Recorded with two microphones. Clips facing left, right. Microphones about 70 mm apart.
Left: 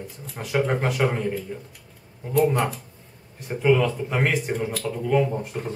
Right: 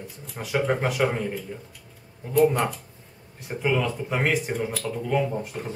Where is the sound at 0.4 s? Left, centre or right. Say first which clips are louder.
Left 1 dB; centre.